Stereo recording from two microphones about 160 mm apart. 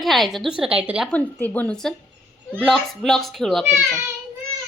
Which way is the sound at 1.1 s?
10° left (ahead or behind).